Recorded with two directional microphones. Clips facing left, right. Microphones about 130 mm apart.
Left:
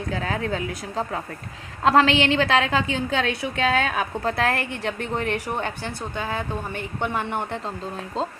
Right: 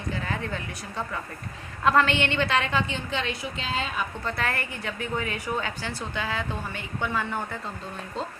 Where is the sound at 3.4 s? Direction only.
65° left (ahead or behind).